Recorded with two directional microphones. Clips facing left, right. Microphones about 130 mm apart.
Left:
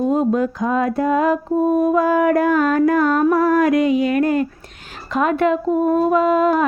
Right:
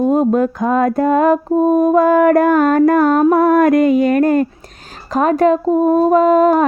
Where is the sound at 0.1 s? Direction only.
50° right (ahead or behind).